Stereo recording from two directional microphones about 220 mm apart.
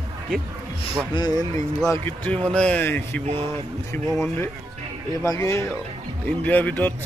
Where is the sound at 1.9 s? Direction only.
10° left (ahead or behind).